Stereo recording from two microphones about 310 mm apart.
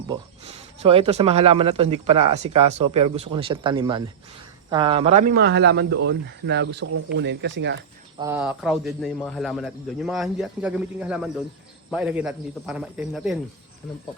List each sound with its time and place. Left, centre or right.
0.1 s speech: centre; by 7.8 s right
8.2 s a man's voice: centre